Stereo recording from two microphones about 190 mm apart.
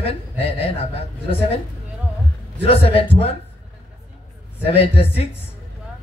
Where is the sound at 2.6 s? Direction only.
30° left (ahead or behind).